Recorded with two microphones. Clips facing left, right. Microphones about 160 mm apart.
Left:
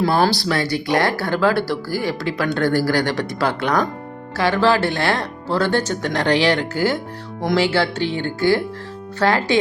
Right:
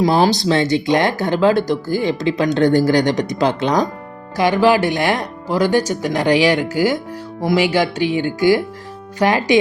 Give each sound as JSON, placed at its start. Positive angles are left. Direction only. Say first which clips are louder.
{"t": 0.0, "sound": "speech", "louder": "right 3 dB", "side_deg": -15}